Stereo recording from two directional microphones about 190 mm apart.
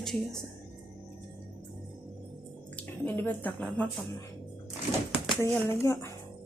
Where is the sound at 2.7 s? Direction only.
10° left (ahead or behind).